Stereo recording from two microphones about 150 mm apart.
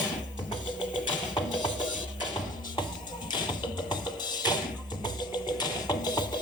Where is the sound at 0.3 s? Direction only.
30° left (ahead or behind).